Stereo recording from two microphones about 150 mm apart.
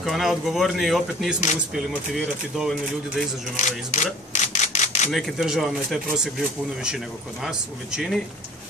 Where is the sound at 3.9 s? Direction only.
55° left (ahead or behind).